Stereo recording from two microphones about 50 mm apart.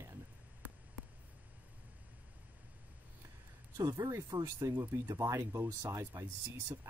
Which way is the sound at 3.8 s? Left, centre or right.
Right.